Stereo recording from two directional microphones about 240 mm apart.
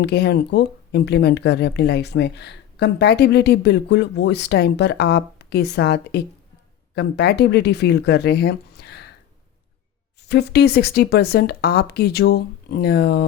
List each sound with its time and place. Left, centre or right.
0.0 s speech: left
10.2 s speech: left